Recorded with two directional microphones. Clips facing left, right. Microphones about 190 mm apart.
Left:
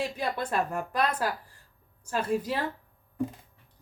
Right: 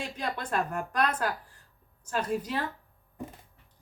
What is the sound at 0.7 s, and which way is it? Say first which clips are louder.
Speech: left 1 dB; 5° left (ahead or behind).